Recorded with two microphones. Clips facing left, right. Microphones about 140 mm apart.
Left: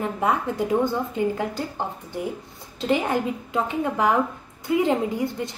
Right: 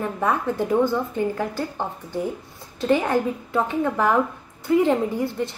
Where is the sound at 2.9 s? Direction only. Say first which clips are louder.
Right 2 dB; 15° left (ahead or behind).